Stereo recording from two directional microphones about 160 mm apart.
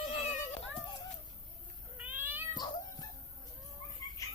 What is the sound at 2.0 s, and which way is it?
Cat, 10° right (ahead or behind).